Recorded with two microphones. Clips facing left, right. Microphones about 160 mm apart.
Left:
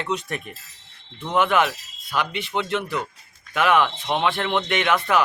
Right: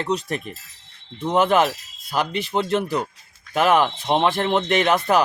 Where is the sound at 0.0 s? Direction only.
35° right (ahead or behind).